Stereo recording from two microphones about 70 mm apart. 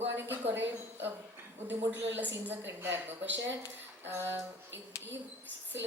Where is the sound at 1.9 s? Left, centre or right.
Right.